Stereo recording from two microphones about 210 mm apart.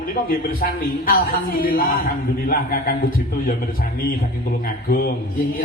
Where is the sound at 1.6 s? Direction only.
40° left (ahead or behind).